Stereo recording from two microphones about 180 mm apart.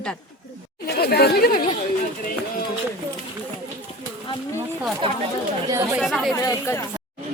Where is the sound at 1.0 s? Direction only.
60° left (ahead or behind).